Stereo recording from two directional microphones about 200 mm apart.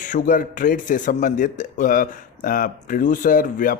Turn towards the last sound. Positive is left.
turn(degrees=45)  # may be behind; listen again after turning